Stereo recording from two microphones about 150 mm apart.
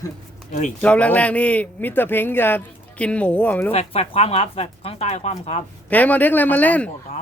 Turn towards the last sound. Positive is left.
turn(degrees=10)  # may be behind; listen again after turning